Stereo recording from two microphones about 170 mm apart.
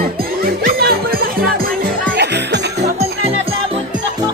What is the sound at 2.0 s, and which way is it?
Music, 80° right.